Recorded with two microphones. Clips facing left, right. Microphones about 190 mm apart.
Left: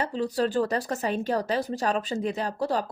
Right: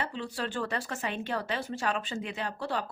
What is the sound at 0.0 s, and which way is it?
A woman's voice, 40° left (ahead or behind).